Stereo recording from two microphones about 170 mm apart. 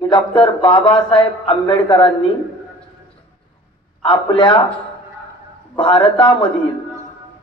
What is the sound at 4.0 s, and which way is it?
Speech, 30° left (ahead or behind).